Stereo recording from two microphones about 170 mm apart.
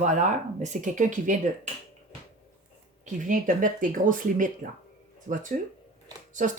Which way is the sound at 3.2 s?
50° right (ahead or behind).